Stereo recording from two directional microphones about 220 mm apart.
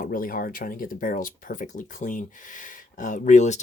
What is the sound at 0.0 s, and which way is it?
Speech, 40° left (ahead or behind).